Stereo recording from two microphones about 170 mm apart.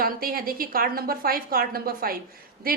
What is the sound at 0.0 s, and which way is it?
A woman's voice, 60° right (ahead or behind).